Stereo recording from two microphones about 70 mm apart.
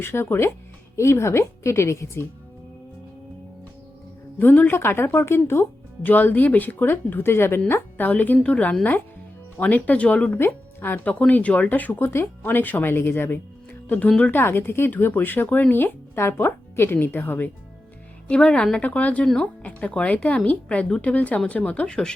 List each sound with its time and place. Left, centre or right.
0.0 s speech: left
4.4 s speech: left
6.1 s speech: left
7.7 s speech: left
10.3 s speech: left
18.3 s a woman's voice: centre
18.8 s speech: left